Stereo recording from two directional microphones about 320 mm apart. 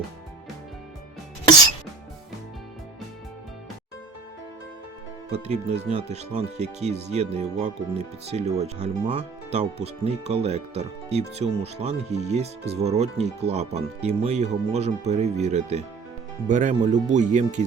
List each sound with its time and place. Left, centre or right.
5.5 s speech: right